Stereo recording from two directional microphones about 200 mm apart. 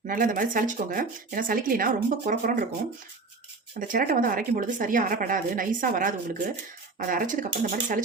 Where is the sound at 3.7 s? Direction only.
45° right (ahead or behind).